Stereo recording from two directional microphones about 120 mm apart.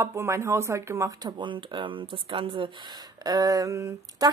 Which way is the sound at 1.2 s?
40° right (ahead or behind).